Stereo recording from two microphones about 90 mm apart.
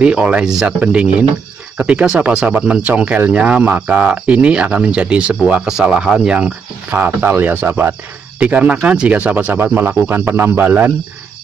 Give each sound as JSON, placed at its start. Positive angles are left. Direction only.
{"t": 0.0, "sound": "speech", "side_deg": -10}